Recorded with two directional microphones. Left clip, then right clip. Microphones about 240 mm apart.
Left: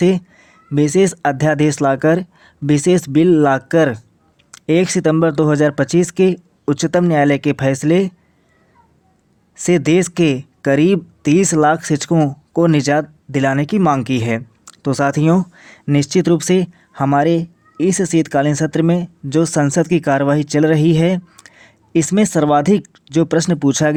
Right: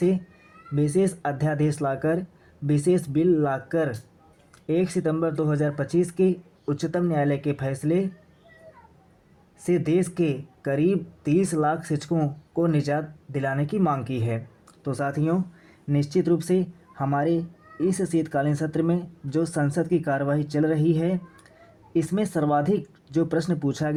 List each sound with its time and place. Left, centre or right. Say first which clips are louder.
0.8 s speech: left 10 dB; left
9.6 s speech: left 9 dB; left